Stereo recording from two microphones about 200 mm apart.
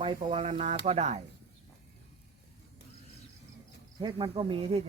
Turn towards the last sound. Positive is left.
turn(degrees=-25)  # may be behind; listen again after turning